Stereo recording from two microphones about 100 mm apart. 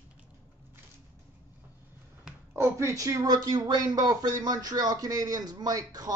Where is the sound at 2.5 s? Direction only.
30° right (ahead or behind).